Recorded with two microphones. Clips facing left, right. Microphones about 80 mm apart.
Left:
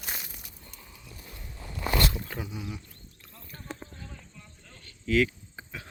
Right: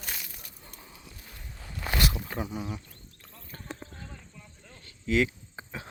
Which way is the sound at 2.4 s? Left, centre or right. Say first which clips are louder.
Right 3 dB; right.